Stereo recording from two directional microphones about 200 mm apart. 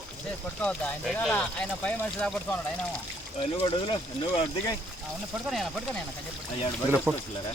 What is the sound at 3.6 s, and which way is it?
Speech, 20° left (ahead or behind).